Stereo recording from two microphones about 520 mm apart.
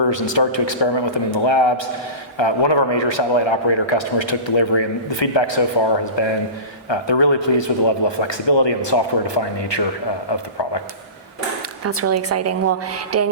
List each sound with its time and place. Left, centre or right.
0.1 s a man's voice: left
11.8 s a woman's voice: right